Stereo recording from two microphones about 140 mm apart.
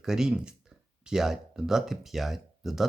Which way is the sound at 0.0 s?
5° right (ahead or behind).